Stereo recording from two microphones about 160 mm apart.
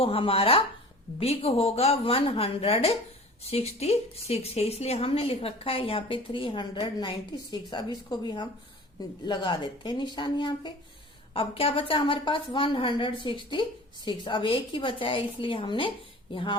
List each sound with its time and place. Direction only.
0.0 s a woman's voice: 35° left (ahead or behind)